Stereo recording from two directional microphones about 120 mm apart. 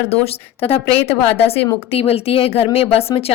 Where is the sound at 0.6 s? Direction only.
55° left (ahead or behind).